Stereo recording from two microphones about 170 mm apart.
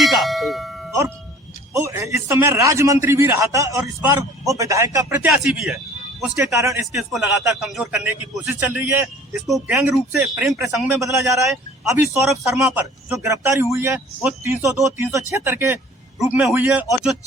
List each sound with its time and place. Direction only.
0.0 s bell: centre (ahead or behind)
0.9 s music: 15° right (ahead or behind)
1.7 s a man's voice: 20° right (ahead or behind)
6.5 s a man's voice: 15° right (ahead or behind)
6.9 s a man's voice: centre (ahead or behind)
16.1 s speech: 5° right (ahead or behind)